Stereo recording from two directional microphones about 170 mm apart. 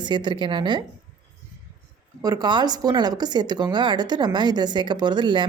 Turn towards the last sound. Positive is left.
turn(degrees=-25)  # may be behind; listen again after turning